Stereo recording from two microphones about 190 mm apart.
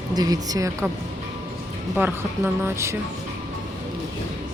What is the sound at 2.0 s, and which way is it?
Speech, 10° right (ahead or behind).